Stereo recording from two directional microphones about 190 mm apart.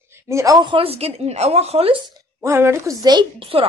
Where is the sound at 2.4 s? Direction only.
15° right (ahead or behind); by 3.7 s 30° right (ahead or behind).